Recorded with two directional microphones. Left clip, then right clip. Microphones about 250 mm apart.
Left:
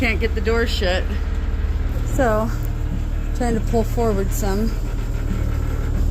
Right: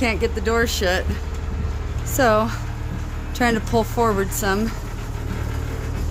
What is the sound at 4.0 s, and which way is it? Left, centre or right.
Speech, centre.